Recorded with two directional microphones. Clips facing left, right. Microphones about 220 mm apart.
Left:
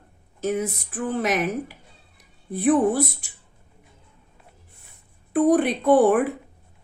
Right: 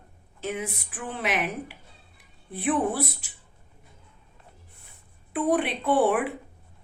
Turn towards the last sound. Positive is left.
turn(degrees=45)  # may be behind; listen again after turning